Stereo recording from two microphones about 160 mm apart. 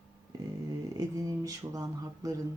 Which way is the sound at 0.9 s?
25° right (ahead or behind).